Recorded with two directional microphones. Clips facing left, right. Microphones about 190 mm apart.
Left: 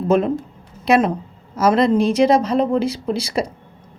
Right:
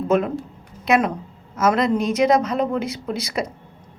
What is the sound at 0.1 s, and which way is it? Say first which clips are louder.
Speech: left 3 dB; 30° left (ahead or behind).